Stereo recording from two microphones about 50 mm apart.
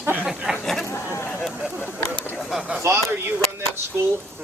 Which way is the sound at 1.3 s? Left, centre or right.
Centre.